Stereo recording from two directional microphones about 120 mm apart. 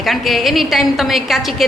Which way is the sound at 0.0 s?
Centre (ahead or behind).